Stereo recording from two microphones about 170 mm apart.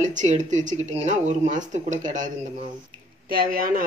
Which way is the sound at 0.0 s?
45° right (ahead or behind).